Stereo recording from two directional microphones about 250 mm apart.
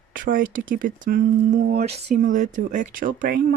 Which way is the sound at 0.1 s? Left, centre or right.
Right.